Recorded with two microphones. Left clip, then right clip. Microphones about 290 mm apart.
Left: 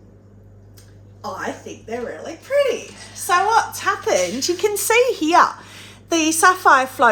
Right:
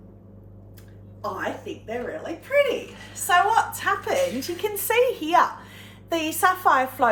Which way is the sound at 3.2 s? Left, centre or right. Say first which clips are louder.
Left 3 dB; centre.